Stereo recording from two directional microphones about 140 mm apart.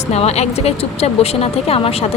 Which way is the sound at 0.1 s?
50° left (ahead or behind).